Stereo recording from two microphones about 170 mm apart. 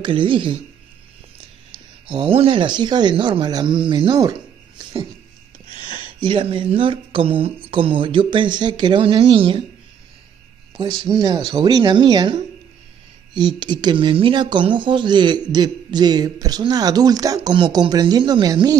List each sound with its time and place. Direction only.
0.0 s speech: 30° right (ahead or behind)
2.0 s speech: 30° right (ahead or behind)
6.2 s speech: 30° right (ahead or behind)
10.8 s speech: 30° right (ahead or behind)
13.6 s speech: 25° right (ahead or behind)